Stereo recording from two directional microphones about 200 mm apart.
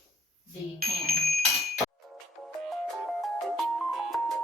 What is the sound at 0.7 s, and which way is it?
Speech, 50° right (ahead or behind).